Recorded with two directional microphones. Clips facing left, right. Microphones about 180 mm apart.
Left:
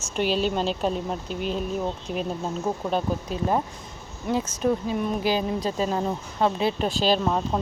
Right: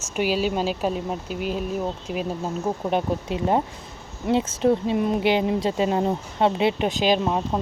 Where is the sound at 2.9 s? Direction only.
20° right (ahead or behind).